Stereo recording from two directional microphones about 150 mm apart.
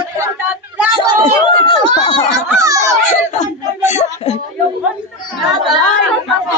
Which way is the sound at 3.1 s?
50° left (ahead or behind).